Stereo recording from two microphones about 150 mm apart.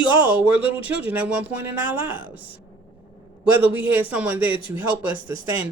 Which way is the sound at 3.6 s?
10° right (ahead or behind).